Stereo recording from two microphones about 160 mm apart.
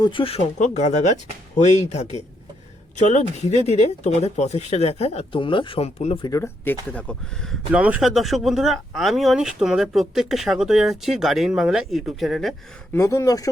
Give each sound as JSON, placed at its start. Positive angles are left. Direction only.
{"t": 0.0, "sound": "speech", "side_deg": 30}
{"t": 6.2, "sound": "speech", "side_deg": 20}
{"t": 7.7, "sound": "speech", "side_deg": -10}
{"t": 12.9, "sound": "speech", "side_deg": 20}